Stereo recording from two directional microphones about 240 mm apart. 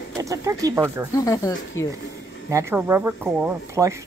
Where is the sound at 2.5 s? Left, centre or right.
Centre.